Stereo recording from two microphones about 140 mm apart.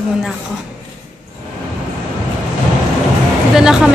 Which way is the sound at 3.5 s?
5° right (ahead or behind).